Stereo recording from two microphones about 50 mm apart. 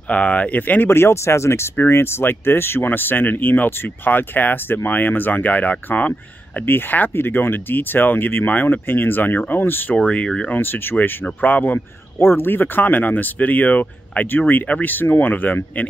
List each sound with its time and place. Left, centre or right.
0.1 s speech: left
0.8 s speech: left
6.6 s speech: left
10.1 s speech: left
10.5 s speech: left
12.2 s speech: left